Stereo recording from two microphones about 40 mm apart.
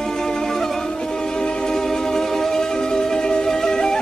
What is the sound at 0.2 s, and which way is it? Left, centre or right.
Music, centre.